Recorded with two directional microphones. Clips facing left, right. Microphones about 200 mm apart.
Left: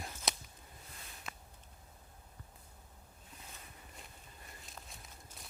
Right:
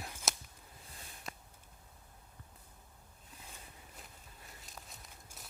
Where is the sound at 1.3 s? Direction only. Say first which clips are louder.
Right 2 dB; 35° right (ahead or behind).